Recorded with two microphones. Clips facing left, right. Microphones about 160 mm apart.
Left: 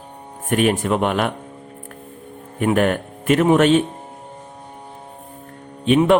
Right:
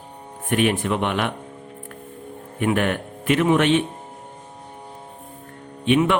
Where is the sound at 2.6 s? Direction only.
40° left (ahead or behind).